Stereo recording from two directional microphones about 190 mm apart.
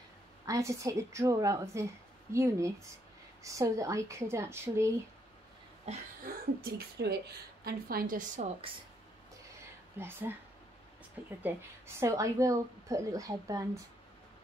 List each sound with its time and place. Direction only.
0.5 s a woman's voice: 15° right (ahead or behind)
5.9 s a sound: 35° right (ahead or behind)
6.2 s a woman's voice: 55° right (ahead or behind)
9.9 s a woman's voice: 10° right (ahead or behind)
12.0 s a woman's voice: 15° right (ahead or behind)